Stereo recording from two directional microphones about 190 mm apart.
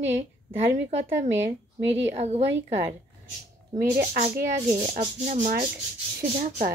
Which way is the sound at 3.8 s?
40° right (ahead or behind).